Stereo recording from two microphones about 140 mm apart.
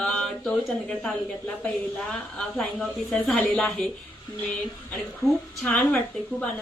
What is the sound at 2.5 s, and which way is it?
Speech, 5° left (ahead or behind).